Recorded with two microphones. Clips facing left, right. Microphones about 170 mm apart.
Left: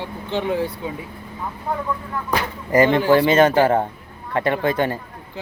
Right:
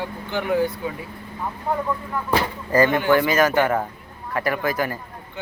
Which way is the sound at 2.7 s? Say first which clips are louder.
Left 3 dB; 20° left (ahead or behind).